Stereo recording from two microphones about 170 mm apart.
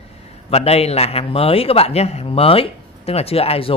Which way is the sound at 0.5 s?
35° left (ahead or behind).